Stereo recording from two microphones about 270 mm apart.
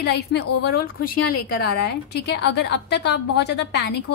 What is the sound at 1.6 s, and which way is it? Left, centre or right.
A woman's voice, left.